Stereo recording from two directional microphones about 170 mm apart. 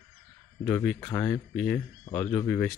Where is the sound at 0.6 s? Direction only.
5° left (ahead or behind).